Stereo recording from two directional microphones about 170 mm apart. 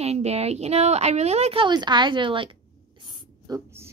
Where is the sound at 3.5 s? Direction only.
20° right (ahead or behind).